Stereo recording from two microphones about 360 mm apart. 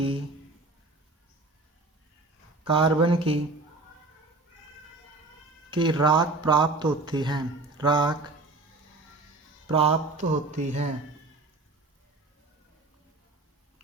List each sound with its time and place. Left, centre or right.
2.6 s speech: centre
5.7 s speech: centre
9.6 s mantra: centre